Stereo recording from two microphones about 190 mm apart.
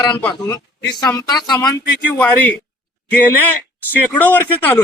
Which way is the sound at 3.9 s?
10° left (ahead or behind).